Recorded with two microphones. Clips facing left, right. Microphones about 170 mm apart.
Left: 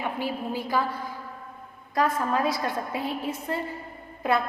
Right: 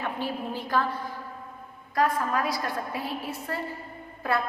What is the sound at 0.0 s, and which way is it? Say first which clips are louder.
Speech: left 1 dB; 10° left (ahead or behind).